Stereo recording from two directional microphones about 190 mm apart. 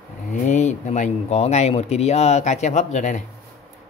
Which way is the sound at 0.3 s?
40° left (ahead or behind).